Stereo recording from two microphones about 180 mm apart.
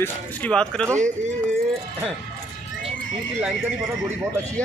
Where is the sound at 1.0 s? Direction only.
40° right (ahead or behind).